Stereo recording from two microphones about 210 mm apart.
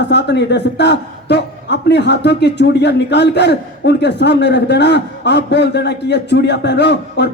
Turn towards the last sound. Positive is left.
turn(degrees=55)  # may be behind; listen again after turning